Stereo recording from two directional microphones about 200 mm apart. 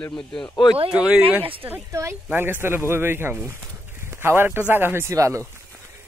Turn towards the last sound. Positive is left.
turn(degrees=-15)  # may be behind; listen again after turning